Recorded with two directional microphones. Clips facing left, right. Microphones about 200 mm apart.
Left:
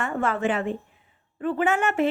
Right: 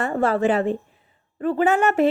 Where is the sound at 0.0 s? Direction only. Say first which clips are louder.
Right 5 dB; 35° right (ahead or behind).